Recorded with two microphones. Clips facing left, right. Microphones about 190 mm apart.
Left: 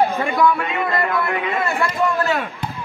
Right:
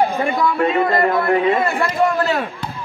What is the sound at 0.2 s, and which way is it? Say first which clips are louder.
A man's voice: right 1 dB; 35° right (ahead or behind).